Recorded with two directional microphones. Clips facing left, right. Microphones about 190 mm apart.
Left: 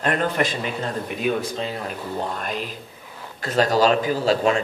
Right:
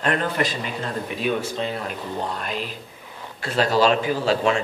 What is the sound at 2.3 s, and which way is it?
A man's voice, 45° left (ahead or behind).